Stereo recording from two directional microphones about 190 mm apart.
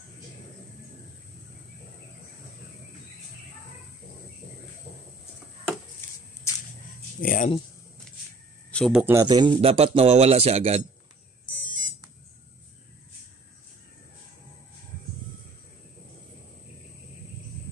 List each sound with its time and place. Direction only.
6.0 s a sound: 10° left (ahead or behind)
7.2 s speech: 45° left (ahead or behind)
8.7 s speech: centre (ahead or behind)
9.0 s speech: 15° right (ahead or behind); by 10.8 s 30° right (ahead or behind)